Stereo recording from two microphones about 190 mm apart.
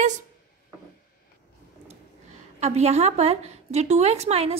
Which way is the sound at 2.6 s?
35° right (ahead or behind).